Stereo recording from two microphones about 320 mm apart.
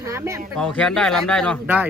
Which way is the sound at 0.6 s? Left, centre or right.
Centre.